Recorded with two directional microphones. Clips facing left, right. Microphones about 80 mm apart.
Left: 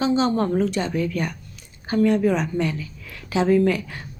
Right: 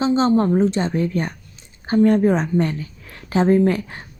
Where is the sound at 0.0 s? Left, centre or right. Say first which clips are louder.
Right 3 dB; right.